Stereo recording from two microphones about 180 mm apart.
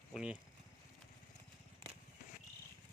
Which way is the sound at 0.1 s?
5° right (ahead or behind).